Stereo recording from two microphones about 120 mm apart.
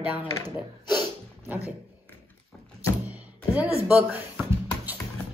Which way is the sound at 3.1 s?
10° right (ahead or behind).